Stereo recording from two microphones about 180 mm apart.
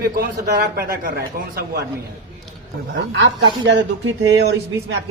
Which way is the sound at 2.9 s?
85° right.